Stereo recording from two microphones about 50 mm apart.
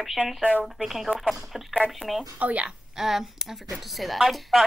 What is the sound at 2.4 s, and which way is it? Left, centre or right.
Speech, right.